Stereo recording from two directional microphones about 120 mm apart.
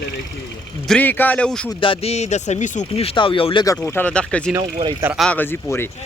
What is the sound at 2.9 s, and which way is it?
Speech, 55° left (ahead or behind).